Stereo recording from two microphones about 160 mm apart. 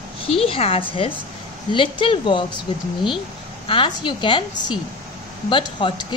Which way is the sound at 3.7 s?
30° left (ahead or behind).